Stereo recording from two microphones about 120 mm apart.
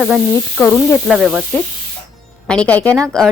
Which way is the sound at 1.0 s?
5° right (ahead or behind).